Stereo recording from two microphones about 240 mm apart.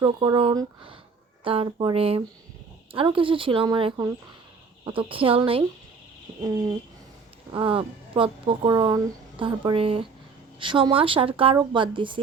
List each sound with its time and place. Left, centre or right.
0.0 s speech: centre
7.5 s speech: right